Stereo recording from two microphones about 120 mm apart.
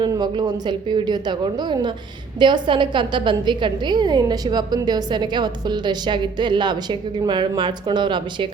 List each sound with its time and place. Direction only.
0.0 s a woman's voice: 35° right (ahead or behind)